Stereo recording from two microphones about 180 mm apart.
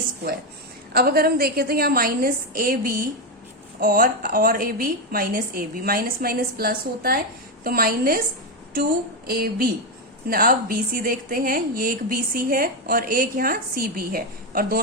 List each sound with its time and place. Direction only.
0.9 s a woman's voice: 55° right (ahead or behind)